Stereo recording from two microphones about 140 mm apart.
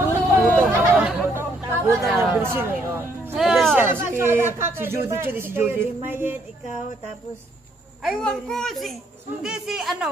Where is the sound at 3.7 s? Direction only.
15° right (ahead or behind).